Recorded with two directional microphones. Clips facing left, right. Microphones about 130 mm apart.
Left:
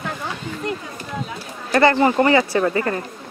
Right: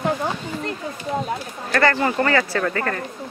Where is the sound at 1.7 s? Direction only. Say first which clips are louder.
Left 4 dB; 20° left (ahead or behind).